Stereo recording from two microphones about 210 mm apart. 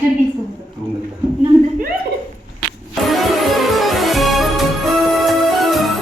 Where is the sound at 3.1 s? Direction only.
Centre (ahead or behind).